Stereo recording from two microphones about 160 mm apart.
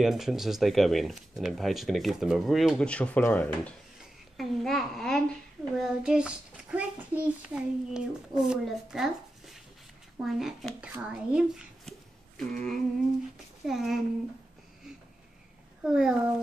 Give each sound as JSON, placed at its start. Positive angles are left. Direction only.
{"t": 0.0, "sound": "speech", "side_deg": 0}
{"t": 4.4, "sound": "a child's voice", "side_deg": 0}
{"t": 15.8, "sound": "speech", "side_deg": -5}